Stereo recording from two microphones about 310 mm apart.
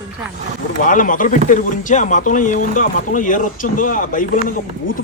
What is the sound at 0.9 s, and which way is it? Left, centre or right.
Speech, left.